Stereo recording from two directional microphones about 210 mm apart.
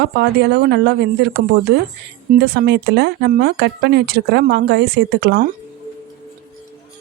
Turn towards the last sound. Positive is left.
turn(degrees=-45)  # may be behind; listen again after turning